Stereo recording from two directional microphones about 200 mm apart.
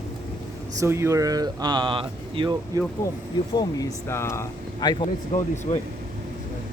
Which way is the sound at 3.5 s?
15° left (ahead or behind).